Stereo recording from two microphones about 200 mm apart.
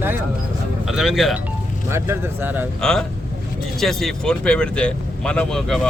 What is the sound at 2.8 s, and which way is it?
Speech, 5° left (ahead or behind).